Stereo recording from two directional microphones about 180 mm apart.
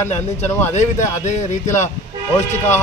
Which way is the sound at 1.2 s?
40° left (ahead or behind).